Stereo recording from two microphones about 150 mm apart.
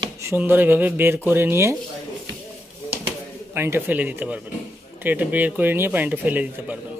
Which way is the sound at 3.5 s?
15° right (ahead or behind).